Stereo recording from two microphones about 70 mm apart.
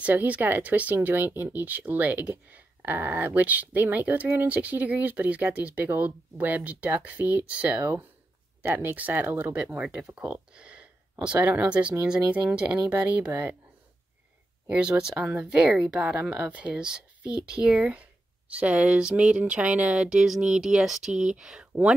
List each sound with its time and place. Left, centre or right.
0.0 s speech: right
8.6 s speech: right
14.7 s speech: centre